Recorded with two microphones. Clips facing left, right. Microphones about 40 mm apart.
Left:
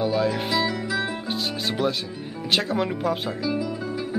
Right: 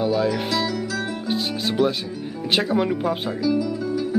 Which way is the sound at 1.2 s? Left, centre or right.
Centre.